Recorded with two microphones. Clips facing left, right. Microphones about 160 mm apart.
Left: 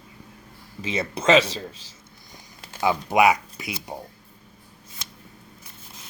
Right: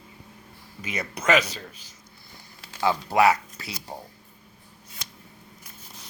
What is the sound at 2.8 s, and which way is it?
Speech, 15° left (ahead or behind).